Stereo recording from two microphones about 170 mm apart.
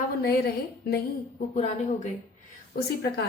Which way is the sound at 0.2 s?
65° left (ahead or behind).